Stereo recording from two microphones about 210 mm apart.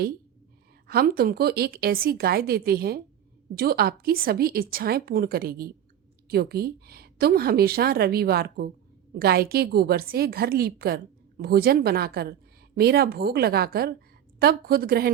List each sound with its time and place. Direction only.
0.9 s a woman's voice: 45° right (ahead or behind)